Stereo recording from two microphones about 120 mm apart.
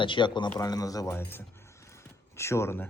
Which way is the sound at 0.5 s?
30° left (ahead or behind).